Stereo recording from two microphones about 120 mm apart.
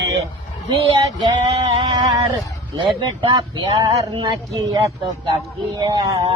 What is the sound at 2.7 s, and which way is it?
Speech, 40° right (ahead or behind).